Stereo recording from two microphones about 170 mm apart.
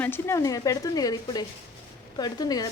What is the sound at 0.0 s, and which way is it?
Speech, 15° left (ahead or behind).